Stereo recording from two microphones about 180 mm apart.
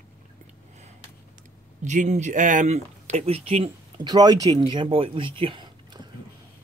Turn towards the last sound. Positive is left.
turn(degrees=-25)  # may be behind; listen again after turning